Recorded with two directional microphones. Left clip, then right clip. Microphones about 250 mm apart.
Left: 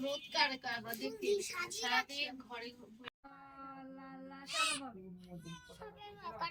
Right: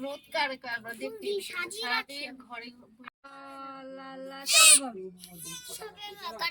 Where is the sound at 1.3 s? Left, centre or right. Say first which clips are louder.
Right 2 dB; right.